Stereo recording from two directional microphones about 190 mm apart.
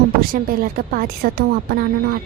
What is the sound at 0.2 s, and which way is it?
Speech, 50° right (ahead or behind).